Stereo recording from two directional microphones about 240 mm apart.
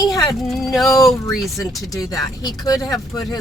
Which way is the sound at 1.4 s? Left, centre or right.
Centre.